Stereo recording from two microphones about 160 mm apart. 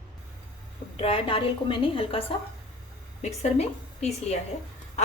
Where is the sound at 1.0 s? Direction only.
35° left (ahead or behind).